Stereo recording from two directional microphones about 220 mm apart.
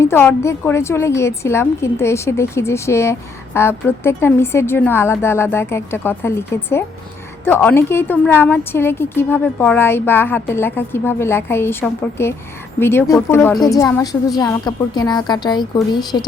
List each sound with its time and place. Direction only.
0.0 s a woman's voice: 10° left (ahead or behind)